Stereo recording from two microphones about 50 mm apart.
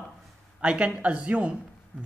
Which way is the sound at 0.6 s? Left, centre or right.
Right.